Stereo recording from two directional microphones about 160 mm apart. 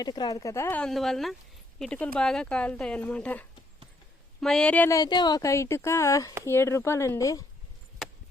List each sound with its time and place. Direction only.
0.0 s speech: 25° left (ahead or behind); by 4.9 s 10° left (ahead or behind)
4.9 s a woman's voice: 25° left (ahead or behind)